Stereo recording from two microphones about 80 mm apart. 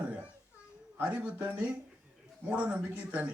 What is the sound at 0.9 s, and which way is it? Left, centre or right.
A man's voice, centre.